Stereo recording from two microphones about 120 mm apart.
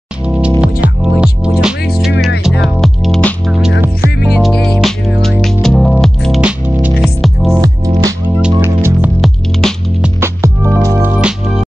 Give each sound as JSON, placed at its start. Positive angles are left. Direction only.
{"t": 0.6, "sound": "music", "side_deg": -10}
{"t": 8.6, "sound": "music", "side_deg": -20}
{"t": 9.2, "sound": "music", "side_deg": 5}
{"t": 10.2, "sound": "music", "side_deg": -25}